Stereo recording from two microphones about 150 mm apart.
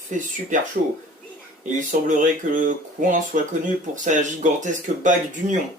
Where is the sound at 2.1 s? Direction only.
60° right (ahead or behind).